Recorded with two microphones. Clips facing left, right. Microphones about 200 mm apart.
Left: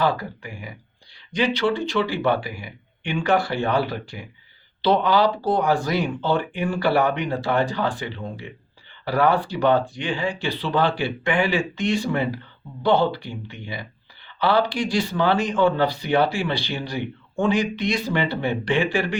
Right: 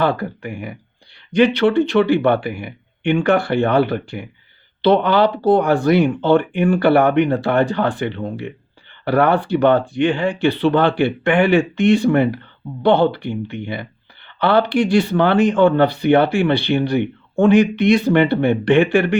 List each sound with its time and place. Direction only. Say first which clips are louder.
0.0 s speech: right 4 dB; 55° right (ahead or behind)